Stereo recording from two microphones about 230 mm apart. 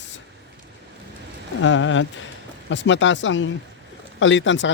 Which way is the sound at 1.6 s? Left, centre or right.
Left.